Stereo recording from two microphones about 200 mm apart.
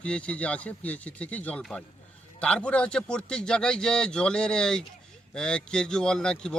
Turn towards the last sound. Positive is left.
turn(degrees=5)  # may be behind; listen again after turning